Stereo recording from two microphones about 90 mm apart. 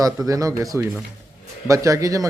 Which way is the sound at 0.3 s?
40° right (ahead or behind).